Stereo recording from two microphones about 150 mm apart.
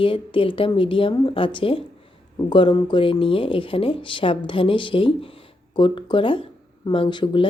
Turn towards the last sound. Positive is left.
turn(degrees=35)  # may be behind; listen again after turning